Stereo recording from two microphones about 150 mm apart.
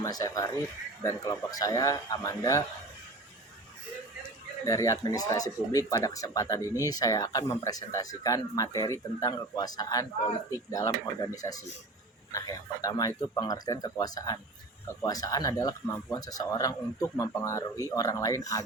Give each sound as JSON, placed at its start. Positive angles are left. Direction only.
{"t": 0.0, "sound": "speech", "side_deg": 25}
{"t": 4.6, "sound": "speech", "side_deg": 20}